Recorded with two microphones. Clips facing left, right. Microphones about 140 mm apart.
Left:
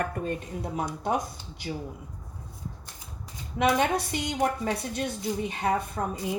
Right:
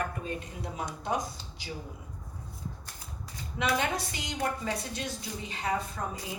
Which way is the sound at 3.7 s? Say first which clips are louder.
Left 6 dB; 60° left (ahead or behind).